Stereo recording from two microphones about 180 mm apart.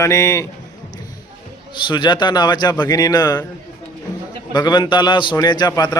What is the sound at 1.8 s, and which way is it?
A man's voice, 25° left (ahead or behind).